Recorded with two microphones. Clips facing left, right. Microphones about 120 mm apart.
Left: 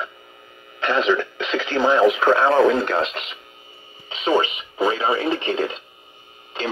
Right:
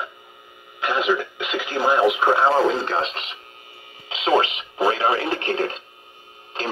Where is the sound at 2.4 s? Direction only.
30° right (ahead or behind).